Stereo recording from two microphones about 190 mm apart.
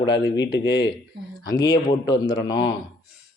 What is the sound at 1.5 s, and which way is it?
Speech, 20° left (ahead or behind).